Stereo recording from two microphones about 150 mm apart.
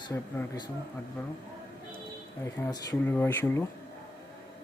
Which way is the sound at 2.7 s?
25° left (ahead or behind).